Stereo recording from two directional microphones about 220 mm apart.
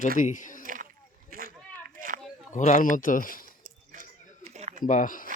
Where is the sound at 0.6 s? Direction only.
35° right (ahead or behind).